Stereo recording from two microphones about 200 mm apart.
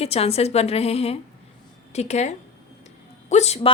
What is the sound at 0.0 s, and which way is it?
A woman's voice, 30° left (ahead or behind).